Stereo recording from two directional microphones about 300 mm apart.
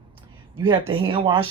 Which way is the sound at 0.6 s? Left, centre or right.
Centre.